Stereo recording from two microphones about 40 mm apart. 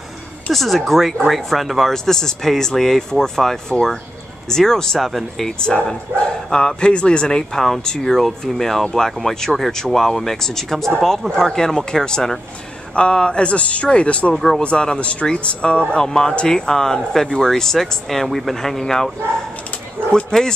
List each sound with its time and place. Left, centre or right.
0.5 s speech: centre
5.6 s speech: left
12.9 s speech: left
14.3 s speech: centre
14.6 s speech: left
20.3 s speech: centre